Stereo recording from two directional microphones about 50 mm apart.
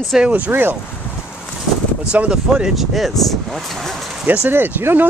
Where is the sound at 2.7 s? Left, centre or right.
Centre.